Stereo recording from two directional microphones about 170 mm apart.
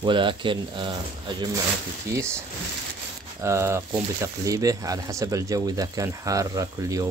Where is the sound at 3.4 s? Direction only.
15° right (ahead or behind).